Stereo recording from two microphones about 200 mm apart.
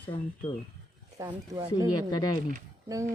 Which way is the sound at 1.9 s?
20° left (ahead or behind).